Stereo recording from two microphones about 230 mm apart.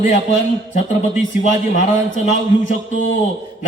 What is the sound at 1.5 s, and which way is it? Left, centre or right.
A man's voice, left.